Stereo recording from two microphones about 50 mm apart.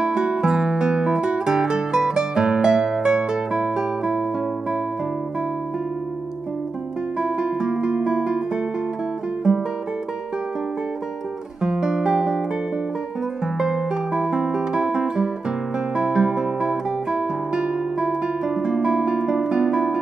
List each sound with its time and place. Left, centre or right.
0.0 s music: centre
7.2 s music: centre
9.5 s guitar: centre
11.6 s music: centre
13.6 s music: centre